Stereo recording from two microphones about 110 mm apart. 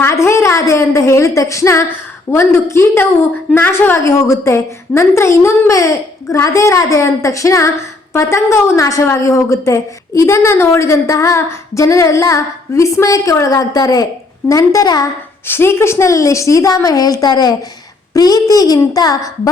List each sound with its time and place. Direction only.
0.0 s a woman's voice: 25° left (ahead or behind)
15.4 s a woman's voice: 20° left (ahead or behind)